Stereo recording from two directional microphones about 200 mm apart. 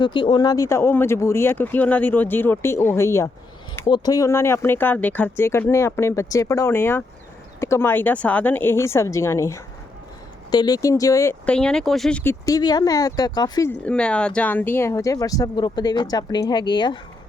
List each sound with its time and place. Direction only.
0.0 s speech: 20° left (ahead or behind)